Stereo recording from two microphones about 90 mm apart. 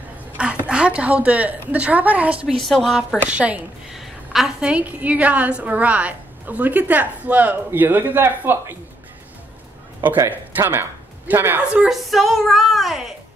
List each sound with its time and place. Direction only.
0.4 s a sound: 10° right (ahead or behind)
1.7 s a woman's voice: 15° right (ahead or behind)
2.6 s music: centre (ahead or behind)
3.2 s a woman's voice: 15° right (ahead or behind)
3.9 s a woman's voice: 5° right (ahead or behind); by 8.7 s 25° right (ahead or behind)
10.6 s speech: 25° right (ahead or behind)
11.7 s a woman's voice: 10° right (ahead or behind)
12.0 s music: centre (ahead or behind)